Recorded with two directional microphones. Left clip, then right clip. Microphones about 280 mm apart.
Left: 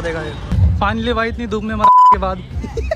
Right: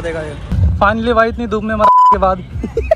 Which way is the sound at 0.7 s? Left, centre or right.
Centre.